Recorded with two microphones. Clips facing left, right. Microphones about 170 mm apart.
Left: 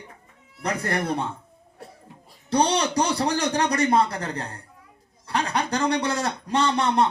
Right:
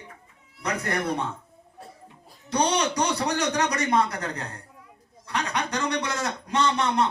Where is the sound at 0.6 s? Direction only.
35° left (ahead or behind).